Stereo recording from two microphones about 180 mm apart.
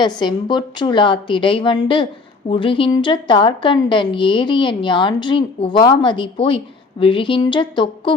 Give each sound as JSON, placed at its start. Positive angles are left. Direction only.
{"t": 0.0, "sound": "a woman's voice", "side_deg": 25}